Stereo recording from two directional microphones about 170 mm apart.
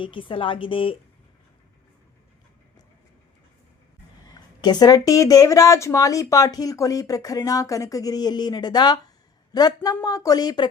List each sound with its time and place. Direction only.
0.0 s a woman's voice: 30° left (ahead or behind)
4.3 s speech: 25° left (ahead or behind)